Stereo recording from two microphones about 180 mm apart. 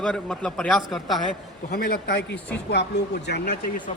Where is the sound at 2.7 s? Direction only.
70° left (ahead or behind); by 3.9 s 50° left (ahead or behind).